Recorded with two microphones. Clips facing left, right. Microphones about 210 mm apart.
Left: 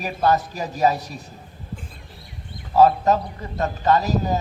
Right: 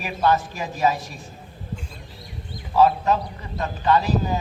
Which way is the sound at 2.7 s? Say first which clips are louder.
Left 2 dB; 40° left (ahead or behind).